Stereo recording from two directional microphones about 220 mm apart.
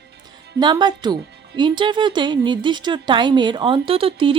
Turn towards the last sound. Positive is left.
turn(degrees=-25)  # may be behind; listen again after turning